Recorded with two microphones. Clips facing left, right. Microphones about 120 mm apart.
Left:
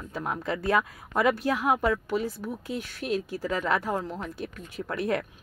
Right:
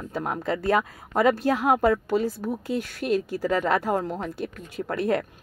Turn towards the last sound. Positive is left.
turn(degrees=-35)  # may be behind; listen again after turning